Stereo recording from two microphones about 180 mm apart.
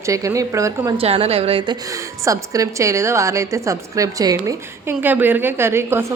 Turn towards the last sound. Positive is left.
turn(degrees=-15)  # may be behind; listen again after turning